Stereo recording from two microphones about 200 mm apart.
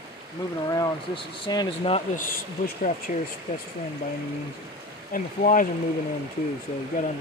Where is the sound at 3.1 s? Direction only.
40° left (ahead or behind).